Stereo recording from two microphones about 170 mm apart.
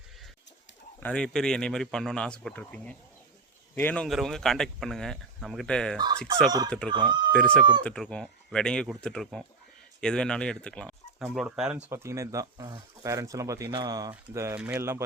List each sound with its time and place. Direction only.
0.9 s speech: 5° left (ahead or behind)
6.9 s speech: 25° right (ahead or behind)
7.3 s speech: 5° left (ahead or behind); by 14.1 s 25° right (ahead or behind)
14.1 s speech: 15° right (ahead or behind)